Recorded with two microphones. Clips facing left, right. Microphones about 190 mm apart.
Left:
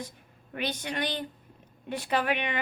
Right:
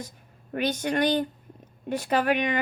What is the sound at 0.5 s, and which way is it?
A woman's voice, 45° right (ahead or behind).